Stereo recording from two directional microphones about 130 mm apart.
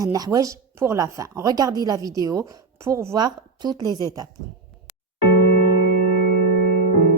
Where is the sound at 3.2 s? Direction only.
30° right (ahead or behind).